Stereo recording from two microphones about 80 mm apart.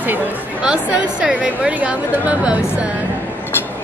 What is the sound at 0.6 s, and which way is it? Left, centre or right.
A woman's voice, centre.